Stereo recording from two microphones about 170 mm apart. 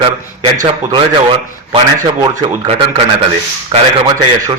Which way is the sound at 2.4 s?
30° right (ahead or behind).